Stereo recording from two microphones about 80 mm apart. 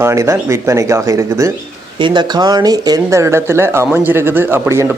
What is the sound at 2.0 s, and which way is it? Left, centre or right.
Speech, right.